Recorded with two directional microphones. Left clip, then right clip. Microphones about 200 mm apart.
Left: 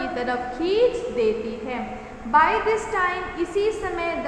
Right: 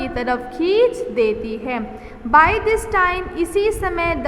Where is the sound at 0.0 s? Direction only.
45° right (ahead or behind).